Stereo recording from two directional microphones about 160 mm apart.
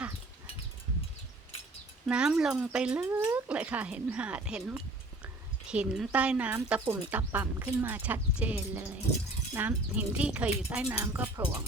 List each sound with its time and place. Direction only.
2.0 s speech: 5° right (ahead or behind)